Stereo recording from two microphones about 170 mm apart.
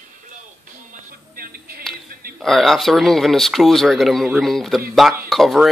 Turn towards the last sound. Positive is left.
turn(degrees=0)  # may be behind; listen again after turning